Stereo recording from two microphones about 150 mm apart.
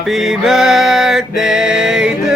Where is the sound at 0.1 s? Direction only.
5° right (ahead or behind).